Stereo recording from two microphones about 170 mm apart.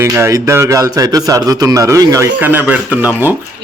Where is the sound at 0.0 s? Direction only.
15° right (ahead or behind).